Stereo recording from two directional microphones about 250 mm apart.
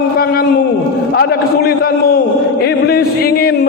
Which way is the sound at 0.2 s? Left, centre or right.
Left.